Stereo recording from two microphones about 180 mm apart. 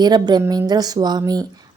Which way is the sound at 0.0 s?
25° right (ahead or behind).